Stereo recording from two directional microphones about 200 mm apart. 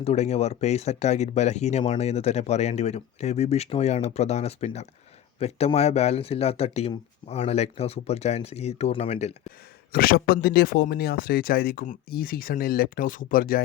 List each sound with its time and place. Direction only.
0.0 s speech: 30° left (ahead or behind)
9.9 s speech: 50° left (ahead or behind)